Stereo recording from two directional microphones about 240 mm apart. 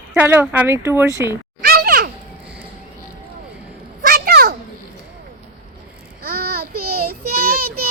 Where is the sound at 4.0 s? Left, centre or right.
Right.